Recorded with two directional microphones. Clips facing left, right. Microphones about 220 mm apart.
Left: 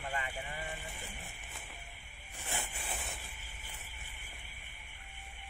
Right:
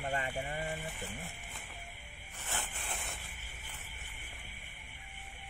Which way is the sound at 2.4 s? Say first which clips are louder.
Left 1 dB; 10° left (ahead or behind).